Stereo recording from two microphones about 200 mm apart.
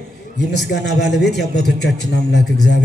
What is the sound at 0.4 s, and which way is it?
Speech, 55° left (ahead or behind).